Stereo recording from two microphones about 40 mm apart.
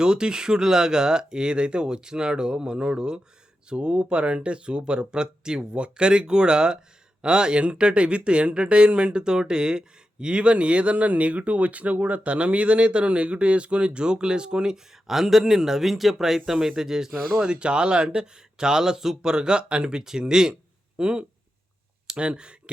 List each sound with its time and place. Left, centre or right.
0.0 s speech: centre